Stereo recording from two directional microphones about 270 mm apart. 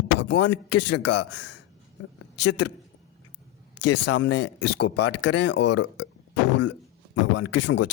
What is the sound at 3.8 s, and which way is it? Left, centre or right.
Speech, left.